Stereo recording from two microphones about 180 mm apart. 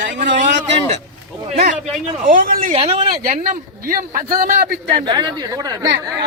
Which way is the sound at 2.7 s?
35° right (ahead or behind).